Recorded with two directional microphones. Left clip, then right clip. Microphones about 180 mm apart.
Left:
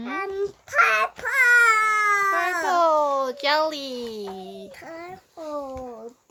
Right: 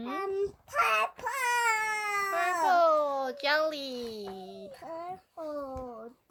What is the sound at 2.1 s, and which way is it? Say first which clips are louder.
Speech: left 7 dB; 5° left (ahead or behind).